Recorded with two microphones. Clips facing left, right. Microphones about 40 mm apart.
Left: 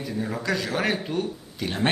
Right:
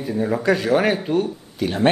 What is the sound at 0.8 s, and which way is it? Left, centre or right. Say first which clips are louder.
Speech: right 6 dB; centre.